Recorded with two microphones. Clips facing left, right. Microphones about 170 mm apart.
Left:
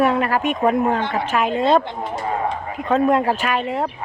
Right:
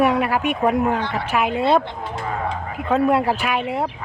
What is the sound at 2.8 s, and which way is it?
A woman's voice, 10° right (ahead or behind).